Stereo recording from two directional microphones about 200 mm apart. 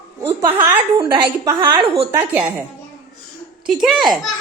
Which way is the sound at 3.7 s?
Centre (ahead or behind).